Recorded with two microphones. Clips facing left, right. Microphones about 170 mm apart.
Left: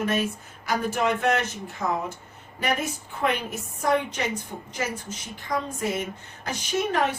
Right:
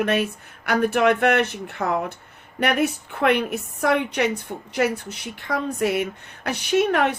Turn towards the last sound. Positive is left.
turn(degrees=-65)  # may be behind; listen again after turning